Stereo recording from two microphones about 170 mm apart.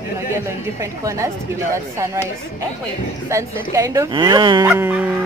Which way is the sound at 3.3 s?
15° right (ahead or behind).